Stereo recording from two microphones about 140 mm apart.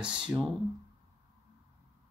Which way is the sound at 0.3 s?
5° right (ahead or behind).